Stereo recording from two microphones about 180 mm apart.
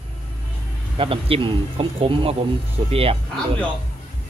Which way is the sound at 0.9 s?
30° right (ahead or behind).